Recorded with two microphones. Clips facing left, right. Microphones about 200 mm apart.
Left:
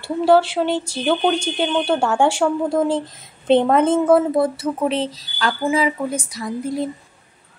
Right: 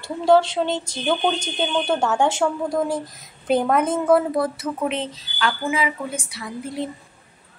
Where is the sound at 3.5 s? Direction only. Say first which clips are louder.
Left 5 dB; 25° left (ahead or behind).